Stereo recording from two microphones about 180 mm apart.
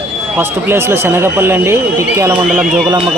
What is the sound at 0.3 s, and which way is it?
Speech, 15° right (ahead or behind).